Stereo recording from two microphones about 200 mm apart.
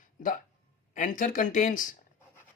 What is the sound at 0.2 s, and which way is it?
Speech, 40° left (ahead or behind).